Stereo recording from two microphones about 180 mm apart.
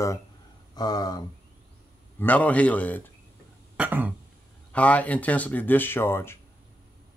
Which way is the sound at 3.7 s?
10° right (ahead or behind).